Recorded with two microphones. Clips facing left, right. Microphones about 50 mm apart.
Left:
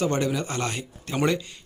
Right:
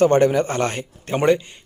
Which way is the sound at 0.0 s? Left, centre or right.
Right.